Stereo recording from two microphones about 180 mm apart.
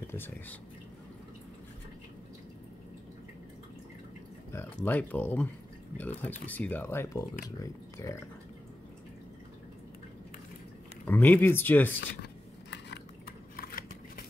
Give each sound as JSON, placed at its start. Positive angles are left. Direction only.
{"t": 0.0, "sound": "speech", "side_deg": 10}
{"t": 4.5, "sound": "speech", "side_deg": 10}
{"t": 11.1, "sound": "speech", "side_deg": 10}
{"t": 13.6, "sound": "a sound", "side_deg": 55}